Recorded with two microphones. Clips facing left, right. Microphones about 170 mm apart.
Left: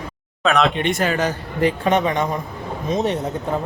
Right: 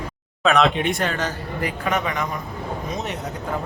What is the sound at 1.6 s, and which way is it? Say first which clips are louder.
A man's voice: left 7 dB; 30° left (ahead or behind).